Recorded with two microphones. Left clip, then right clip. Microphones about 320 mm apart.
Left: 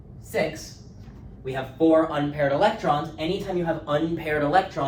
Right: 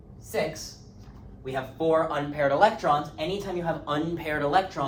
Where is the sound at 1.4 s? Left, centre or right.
Centre.